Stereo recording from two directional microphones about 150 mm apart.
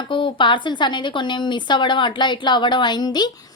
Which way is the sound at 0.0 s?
35° left (ahead or behind).